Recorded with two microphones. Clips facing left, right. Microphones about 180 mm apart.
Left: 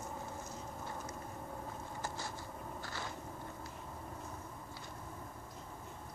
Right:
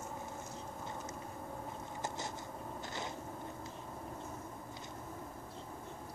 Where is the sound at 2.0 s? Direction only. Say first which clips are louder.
Right 3 dB; 20° right (ahead or behind).